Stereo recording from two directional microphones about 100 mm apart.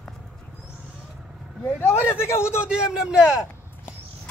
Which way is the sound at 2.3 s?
25° left (ahead or behind).